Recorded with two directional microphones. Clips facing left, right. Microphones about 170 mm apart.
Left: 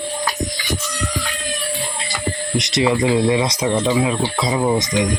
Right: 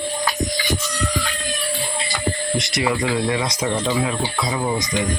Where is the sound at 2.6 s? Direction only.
20° left (ahead or behind).